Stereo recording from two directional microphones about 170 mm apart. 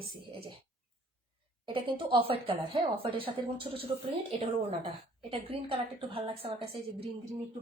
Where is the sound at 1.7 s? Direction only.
30° right (ahead or behind).